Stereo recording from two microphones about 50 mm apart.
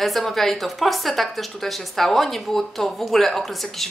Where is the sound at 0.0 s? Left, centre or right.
Centre.